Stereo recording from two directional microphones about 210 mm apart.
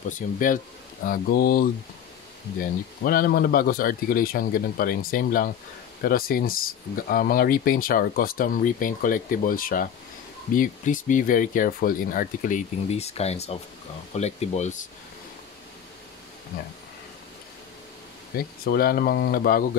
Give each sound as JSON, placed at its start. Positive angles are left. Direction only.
{"t": 0.4, "sound": "speech", "side_deg": 40}
{"t": 18.7, "sound": "speech", "side_deg": 45}